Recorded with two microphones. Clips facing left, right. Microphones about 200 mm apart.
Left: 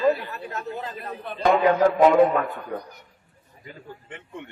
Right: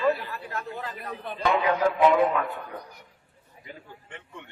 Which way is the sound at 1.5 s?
45° left (ahead or behind).